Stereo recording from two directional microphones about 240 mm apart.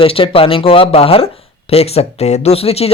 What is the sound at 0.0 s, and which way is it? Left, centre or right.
Speech, left.